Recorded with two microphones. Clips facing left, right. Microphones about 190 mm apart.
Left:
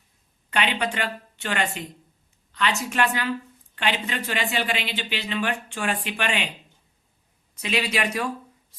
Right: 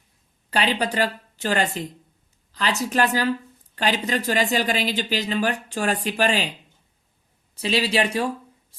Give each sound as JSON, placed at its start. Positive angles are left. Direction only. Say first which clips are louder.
{"t": 0.5, "sound": "speech", "louder": "right 3 dB", "side_deg": -35}
{"t": 7.5, "sound": "speech", "louder": "right 4 dB", "side_deg": -30}